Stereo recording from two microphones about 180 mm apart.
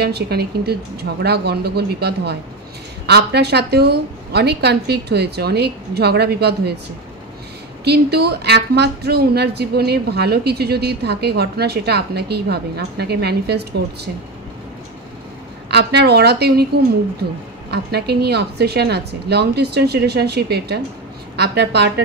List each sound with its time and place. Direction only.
0.0 s a woman's voice: 60° right (ahead or behind)
7.8 s a woman's voice: 65° right (ahead or behind)
15.7 s a woman's voice: 65° right (ahead or behind)